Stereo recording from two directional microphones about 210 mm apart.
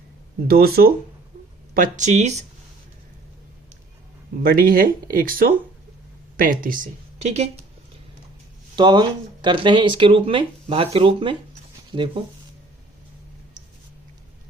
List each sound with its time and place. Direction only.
0.4 s speech: 45° right (ahead or behind)
4.4 s speech: 40° right (ahead or behind)
8.7 s speech: 20° right (ahead or behind)